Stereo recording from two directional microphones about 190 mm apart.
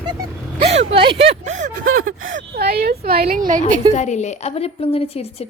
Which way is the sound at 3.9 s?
40° left (ahead or behind).